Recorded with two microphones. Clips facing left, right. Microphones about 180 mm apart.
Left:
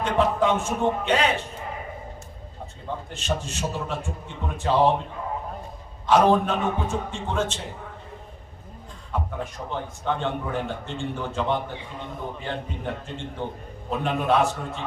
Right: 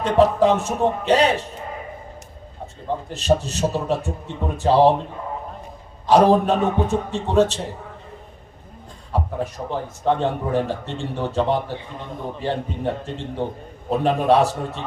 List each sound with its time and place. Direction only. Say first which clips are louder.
0.0 s a man's voice: right 6 dB; 35° right (ahead or behind)
3.1 s a man's voice: right 10 dB; 35° right (ahead or behind)
6.1 s a man's voice: right 4 dB; 35° right (ahead or behind)
9.1 s a man's voice: right 5 dB; 35° right (ahead or behind)